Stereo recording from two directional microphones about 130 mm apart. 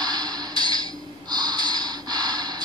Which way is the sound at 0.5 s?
40° left (ahead or behind).